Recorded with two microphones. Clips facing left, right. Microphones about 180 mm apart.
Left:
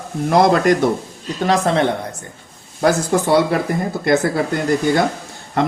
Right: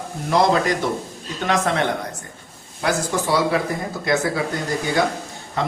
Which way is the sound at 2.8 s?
55° left (ahead or behind).